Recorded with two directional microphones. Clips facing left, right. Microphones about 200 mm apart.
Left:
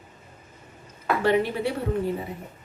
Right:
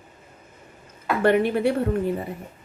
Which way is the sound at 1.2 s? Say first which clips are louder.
Right 4 dB; 55° right (ahead or behind).